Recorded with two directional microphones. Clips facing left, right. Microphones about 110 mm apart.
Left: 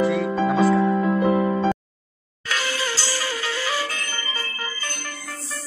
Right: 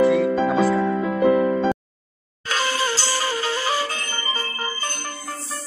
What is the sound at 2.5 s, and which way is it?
Music, 35° right (ahead or behind).